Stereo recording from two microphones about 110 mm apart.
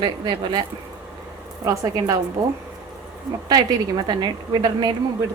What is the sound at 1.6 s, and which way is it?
Speech, 30° right (ahead or behind).